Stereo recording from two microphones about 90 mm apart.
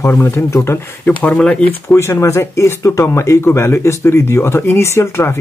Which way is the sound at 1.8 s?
30° left (ahead or behind).